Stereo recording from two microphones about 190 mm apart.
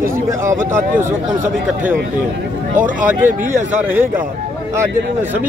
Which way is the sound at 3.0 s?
10° right (ahead or behind).